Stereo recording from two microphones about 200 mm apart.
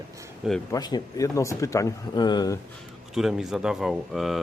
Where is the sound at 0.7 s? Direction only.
20° left (ahead or behind).